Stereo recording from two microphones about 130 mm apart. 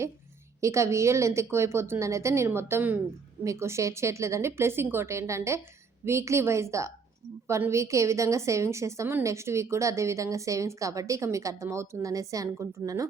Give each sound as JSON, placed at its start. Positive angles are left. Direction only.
{"t": 0.6, "sound": "a woman's voice", "side_deg": -20}